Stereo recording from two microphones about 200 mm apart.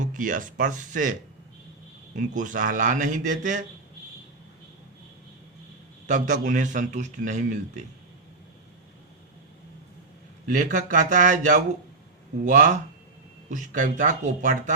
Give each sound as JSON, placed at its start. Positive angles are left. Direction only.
{"t": 0.0, "sound": "a man's voice", "side_deg": -40}
{"t": 2.1, "sound": "a man's voice", "side_deg": -40}
{"t": 6.1, "sound": "a man's voice", "side_deg": -40}
{"t": 10.5, "sound": "a man's voice", "side_deg": -40}